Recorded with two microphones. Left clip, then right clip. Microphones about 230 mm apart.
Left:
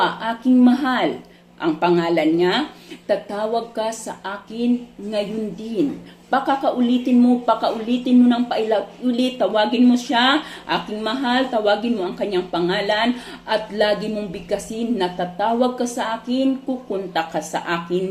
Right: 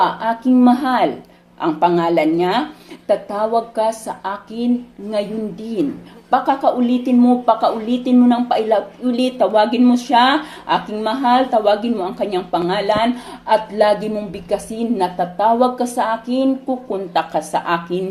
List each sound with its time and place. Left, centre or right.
0.0 s speech: right
6.3 s speech: right